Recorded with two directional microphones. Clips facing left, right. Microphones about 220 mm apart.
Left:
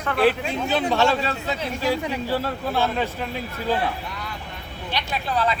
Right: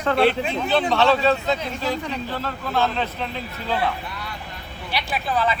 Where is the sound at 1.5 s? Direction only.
10° left (ahead or behind).